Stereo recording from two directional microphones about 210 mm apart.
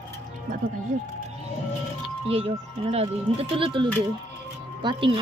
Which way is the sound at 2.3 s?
30° right (ahead or behind).